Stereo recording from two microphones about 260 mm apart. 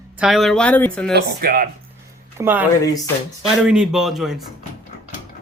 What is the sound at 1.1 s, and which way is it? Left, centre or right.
Speech, right.